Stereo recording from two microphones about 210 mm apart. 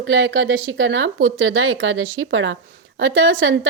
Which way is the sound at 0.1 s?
65° right (ahead or behind).